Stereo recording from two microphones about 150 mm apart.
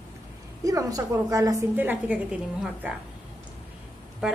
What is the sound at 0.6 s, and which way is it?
A woman's voice, 20° right (ahead or behind).